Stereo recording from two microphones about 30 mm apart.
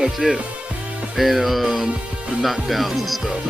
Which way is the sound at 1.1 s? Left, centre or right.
Centre.